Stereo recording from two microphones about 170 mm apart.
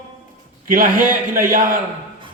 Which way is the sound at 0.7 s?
55° right (ahead or behind).